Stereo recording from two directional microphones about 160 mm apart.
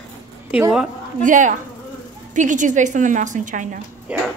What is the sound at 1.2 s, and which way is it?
A woman's voice, 55° right (ahead or behind).